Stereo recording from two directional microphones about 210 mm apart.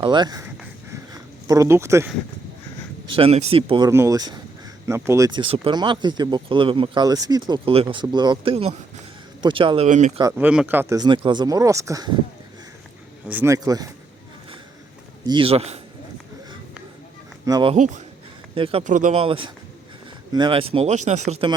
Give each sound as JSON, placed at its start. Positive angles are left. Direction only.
{"t": 0.0, "sound": "speech", "side_deg": -20}
{"t": 1.1, "sound": "a sound", "side_deg": -15}
{"t": 3.1, "sound": "speech", "side_deg": -25}
{"t": 3.8, "sound": "speech", "side_deg": -15}
{"t": 10.2, "sound": "speech", "side_deg": -15}
{"t": 13.2, "sound": "speech", "side_deg": -10}
{"t": 15.3, "sound": "speech", "side_deg": -25}
{"t": 17.4, "sound": "speech", "side_deg": -20}
{"t": 17.7, "sound": "speech", "side_deg": -35}